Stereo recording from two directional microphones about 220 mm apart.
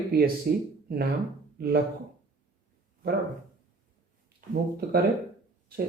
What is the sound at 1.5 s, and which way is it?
Speech, 45° right (ahead or behind).